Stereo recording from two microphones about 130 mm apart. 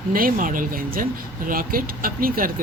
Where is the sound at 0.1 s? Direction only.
90° right.